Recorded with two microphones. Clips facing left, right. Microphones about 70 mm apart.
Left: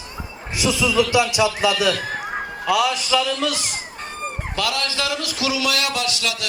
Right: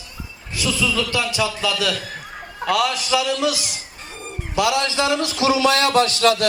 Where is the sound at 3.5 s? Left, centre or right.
Left.